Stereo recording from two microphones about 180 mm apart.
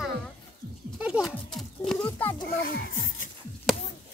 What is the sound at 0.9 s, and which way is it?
Speech, 5° right (ahead or behind).